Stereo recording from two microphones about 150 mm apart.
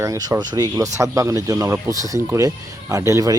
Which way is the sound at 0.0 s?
25° right (ahead or behind).